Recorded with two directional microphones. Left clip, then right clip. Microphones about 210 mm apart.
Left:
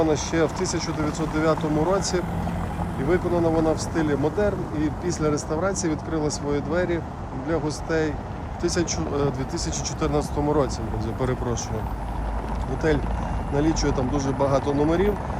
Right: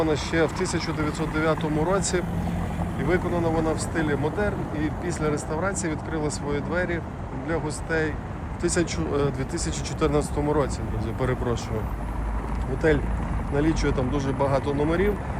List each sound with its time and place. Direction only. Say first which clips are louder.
0.0 s speech: left 1 dB; 25° left (ahead or behind)
12.8 s speech: right 1 dB; 15° left (ahead or behind)